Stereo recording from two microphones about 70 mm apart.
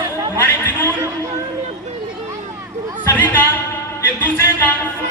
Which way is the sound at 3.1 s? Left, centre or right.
Left.